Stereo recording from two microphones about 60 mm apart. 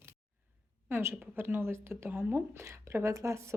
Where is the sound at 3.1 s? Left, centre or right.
Right.